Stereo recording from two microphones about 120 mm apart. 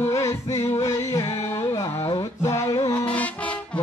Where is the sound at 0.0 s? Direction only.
25° left (ahead or behind).